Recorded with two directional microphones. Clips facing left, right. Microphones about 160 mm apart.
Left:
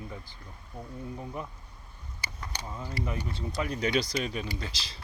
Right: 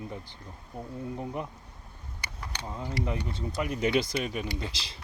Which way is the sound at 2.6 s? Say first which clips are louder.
Right 3 dB; 20° right (ahead or behind).